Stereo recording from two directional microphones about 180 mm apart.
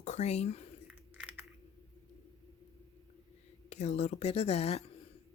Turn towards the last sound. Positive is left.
turn(degrees=35)  # may be behind; listen again after turning